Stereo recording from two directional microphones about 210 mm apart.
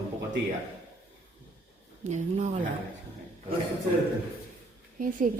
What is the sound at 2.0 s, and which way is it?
Speech, 30° right (ahead or behind).